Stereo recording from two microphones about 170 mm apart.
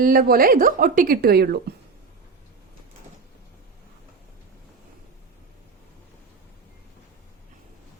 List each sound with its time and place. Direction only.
0.0 s speech: 60° right (ahead or behind)